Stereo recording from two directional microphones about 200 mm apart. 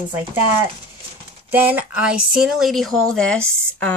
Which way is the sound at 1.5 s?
10° right (ahead or behind).